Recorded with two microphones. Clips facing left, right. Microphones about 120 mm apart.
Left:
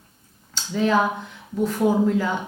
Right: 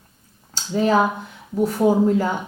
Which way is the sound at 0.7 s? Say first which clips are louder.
Right 2 dB; 40° right (ahead or behind).